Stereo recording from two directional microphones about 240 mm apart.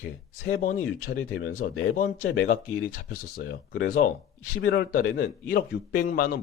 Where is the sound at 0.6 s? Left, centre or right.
Left.